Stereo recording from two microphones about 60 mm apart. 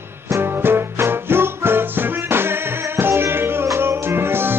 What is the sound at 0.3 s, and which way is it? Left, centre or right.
Music, right.